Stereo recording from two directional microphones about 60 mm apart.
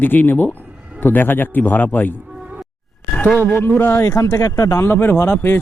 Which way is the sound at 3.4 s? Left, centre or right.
Left.